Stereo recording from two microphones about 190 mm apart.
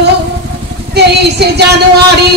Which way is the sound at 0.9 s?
60° right (ahead or behind).